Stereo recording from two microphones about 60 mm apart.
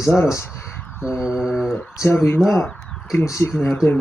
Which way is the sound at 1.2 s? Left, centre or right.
Centre.